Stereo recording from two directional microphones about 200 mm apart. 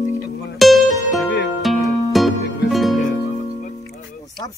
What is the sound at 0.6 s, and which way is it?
Music, centre (ahead or behind).